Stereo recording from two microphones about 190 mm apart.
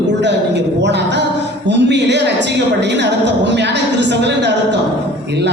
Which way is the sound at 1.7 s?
65° right (ahead or behind).